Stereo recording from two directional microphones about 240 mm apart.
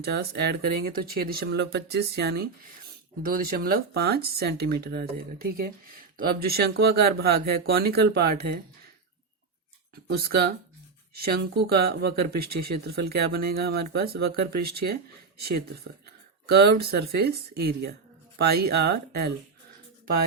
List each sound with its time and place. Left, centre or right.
0.0 s speech: right
9.9 s speech: right
16.5 s speech: right